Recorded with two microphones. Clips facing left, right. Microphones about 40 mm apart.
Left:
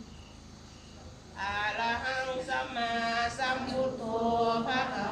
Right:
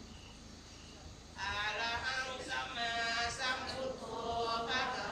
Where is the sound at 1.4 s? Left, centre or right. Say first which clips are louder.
Left 6 dB; left.